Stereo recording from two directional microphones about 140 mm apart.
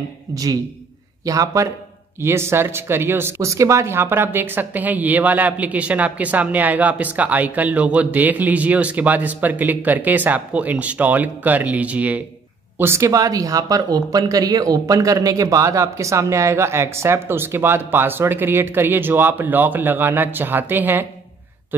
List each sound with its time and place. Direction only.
0.3 s speech: 25° right (ahead or behind)